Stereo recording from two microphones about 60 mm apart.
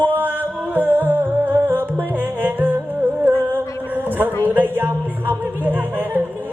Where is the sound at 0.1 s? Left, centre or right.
Right.